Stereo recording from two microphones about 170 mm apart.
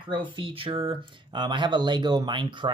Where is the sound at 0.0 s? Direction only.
30° right (ahead or behind).